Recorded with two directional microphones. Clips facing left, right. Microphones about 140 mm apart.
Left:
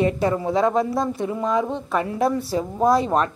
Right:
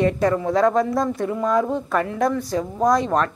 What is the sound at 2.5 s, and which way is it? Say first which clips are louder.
Speech: even; 20° left (ahead or behind).